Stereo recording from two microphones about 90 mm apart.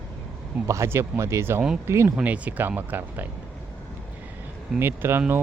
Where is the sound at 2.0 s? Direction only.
15° right (ahead or behind).